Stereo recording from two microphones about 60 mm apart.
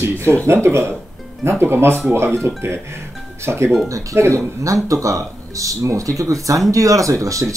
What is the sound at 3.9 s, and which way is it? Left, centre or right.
Speech, right.